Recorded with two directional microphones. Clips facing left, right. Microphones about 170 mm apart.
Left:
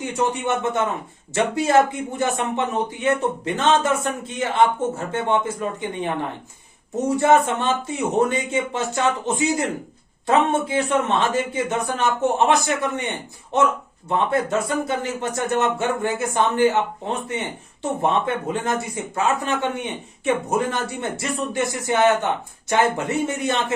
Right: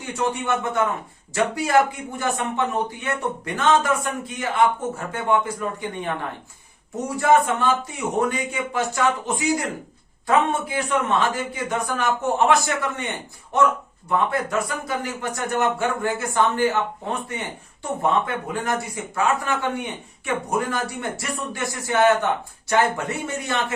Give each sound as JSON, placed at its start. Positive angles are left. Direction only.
{"t": 0.0, "sound": "speech", "side_deg": 20}
{"t": 7.2, "sound": "speech", "side_deg": 25}
{"t": 18.6, "sound": "speech", "side_deg": 25}